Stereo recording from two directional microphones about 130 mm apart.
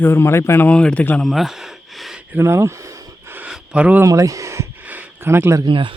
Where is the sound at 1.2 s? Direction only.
Centre (ahead or behind).